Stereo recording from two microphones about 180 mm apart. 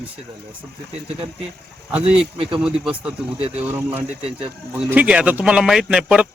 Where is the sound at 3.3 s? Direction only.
35° right (ahead or behind).